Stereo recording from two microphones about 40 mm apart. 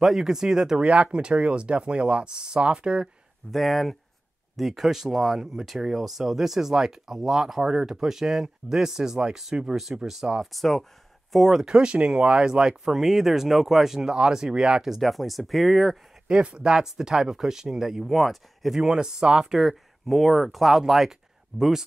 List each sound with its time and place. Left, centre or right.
0.0 s speech: centre
0.8 s speech: right
3.5 s speech: centre
10.4 s speech: centre
11.3 s speech: centre
11.7 s speech: right
12.8 s speech: centre
15.0 s speech: centre
16.3 s speech: right; by 18.8 s centre
18.8 s speech: centre
19.7 s speech: centre